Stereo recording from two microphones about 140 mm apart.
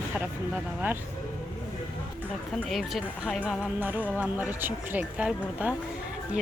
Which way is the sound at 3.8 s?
10° right (ahead or behind).